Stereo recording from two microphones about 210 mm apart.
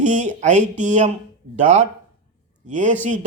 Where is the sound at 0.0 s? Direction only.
35° right (ahead or behind).